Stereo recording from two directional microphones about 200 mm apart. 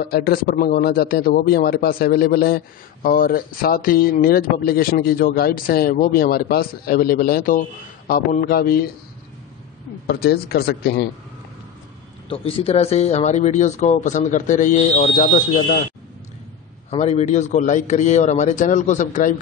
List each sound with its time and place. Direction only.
0.0 s a man's voice: 50° left (ahead or behind)
10.0 s a man's voice: 50° left (ahead or behind)
12.3 s speech: 30° left (ahead or behind)
16.9 s speech: 30° left (ahead or behind)